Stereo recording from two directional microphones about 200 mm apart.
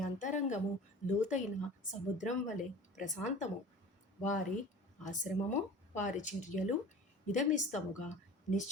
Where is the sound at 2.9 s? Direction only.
40° left (ahead or behind).